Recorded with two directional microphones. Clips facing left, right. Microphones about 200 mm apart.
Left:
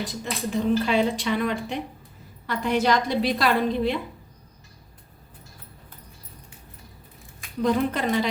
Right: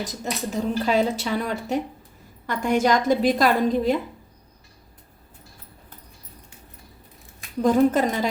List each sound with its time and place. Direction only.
0.1 s a woman's voice: 40° right (ahead or behind)
7.6 s a woman's voice: 45° right (ahead or behind)